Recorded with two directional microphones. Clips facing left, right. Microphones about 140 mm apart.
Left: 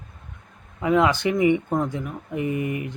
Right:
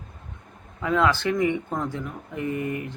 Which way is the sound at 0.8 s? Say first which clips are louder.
Left 3 dB; 15° left (ahead or behind).